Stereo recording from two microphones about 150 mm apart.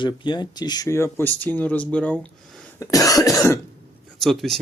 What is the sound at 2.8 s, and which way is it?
Speech, 25° left (ahead or behind).